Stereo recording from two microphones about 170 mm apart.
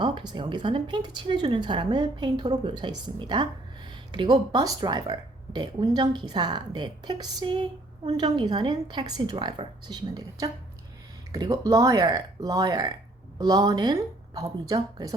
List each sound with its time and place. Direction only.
0.0 s speech: 25° right (ahead or behind)